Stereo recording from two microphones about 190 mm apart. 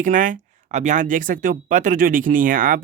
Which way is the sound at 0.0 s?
45° right (ahead or behind).